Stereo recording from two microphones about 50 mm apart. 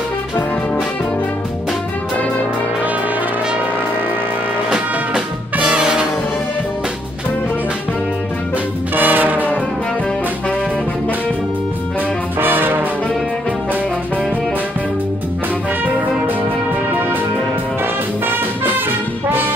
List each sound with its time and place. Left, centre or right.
4.6 s music: centre
8.9 s brass instrument: right
12.4 s music: right
18.2 s music: right